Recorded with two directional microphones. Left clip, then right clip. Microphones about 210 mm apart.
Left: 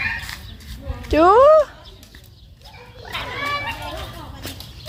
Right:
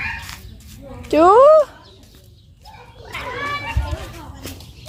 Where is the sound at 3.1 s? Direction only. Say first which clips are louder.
Even; 55° left (ahead or behind).